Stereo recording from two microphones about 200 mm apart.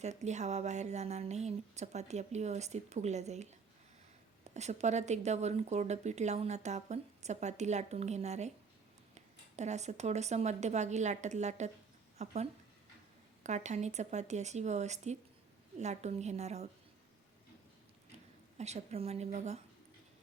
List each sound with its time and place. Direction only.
0.0 s speech: 35° right (ahead or behind)
4.5 s speech: 35° right (ahead or behind)
18.5 s speech: 35° right (ahead or behind)